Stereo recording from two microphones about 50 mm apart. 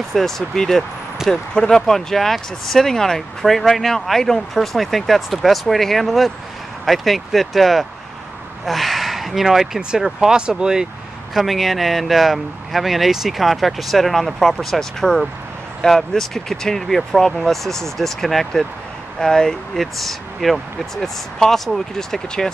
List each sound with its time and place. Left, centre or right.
0.1 s speech: centre
11.3 s speech: centre